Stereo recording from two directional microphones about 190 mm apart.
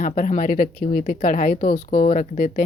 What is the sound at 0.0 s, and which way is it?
Speech, 45° left (ahead or behind).